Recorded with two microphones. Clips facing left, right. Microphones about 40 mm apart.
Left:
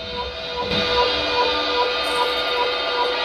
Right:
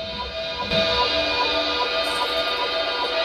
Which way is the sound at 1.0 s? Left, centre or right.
Centre.